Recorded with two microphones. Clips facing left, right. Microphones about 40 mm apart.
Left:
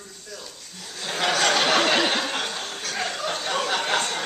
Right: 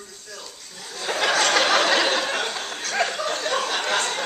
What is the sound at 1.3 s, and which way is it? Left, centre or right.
Speech, centre.